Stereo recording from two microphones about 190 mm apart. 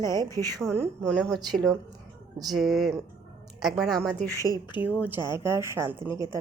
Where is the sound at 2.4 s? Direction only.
Centre (ahead or behind).